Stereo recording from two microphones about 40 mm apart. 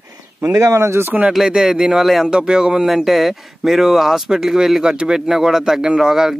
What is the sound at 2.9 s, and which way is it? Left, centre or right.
Speech, centre.